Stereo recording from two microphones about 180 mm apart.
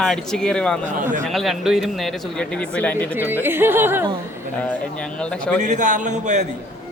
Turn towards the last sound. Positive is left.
turn(degrees=-40)  # may be behind; listen again after turning